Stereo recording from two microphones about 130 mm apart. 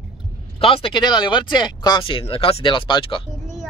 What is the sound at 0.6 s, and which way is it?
Speech, 45° left (ahead or behind).